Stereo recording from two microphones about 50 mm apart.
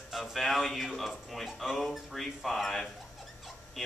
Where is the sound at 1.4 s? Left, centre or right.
Centre.